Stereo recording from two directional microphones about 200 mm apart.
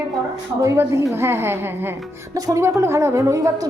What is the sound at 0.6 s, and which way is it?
A woman's voice, 15° right (ahead or behind).